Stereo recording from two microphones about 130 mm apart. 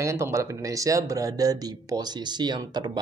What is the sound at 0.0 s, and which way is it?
Speech, 20° right (ahead or behind).